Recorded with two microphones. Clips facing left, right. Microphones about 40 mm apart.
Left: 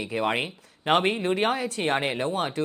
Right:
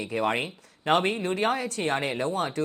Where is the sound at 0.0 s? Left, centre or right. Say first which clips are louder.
Left 1 dB; centre.